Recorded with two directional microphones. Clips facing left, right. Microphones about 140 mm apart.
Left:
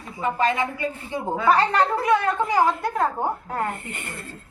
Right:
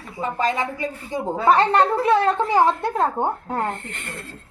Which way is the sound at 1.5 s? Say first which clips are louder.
Right 3 dB; 25° right (ahead or behind).